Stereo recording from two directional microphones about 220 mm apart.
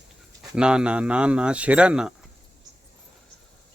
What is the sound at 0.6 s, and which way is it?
Speech, 5° right (ahead or behind).